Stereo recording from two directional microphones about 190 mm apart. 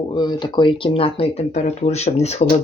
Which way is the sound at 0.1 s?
25° left (ahead or behind).